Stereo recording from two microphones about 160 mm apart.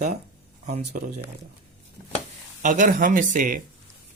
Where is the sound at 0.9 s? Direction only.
60° right (ahead or behind).